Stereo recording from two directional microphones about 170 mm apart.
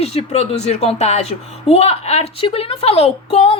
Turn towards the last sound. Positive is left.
turn(degrees=35)  # may be behind; listen again after turning